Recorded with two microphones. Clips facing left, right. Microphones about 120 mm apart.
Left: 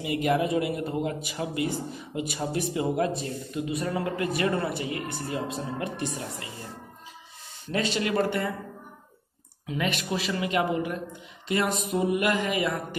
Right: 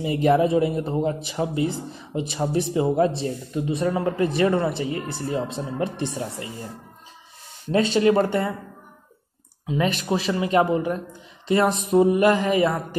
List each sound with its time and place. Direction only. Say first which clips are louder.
0.0 s speech: right 6 dB; 30° right (ahead or behind)
7.7 s speech: right 8 dB; 30° right (ahead or behind)
9.7 s speech: right 6 dB; 30° right (ahead or behind)